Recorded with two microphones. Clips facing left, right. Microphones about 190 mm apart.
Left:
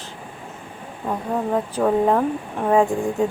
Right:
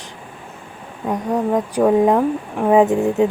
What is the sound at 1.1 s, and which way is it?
Speech, 15° right (ahead or behind).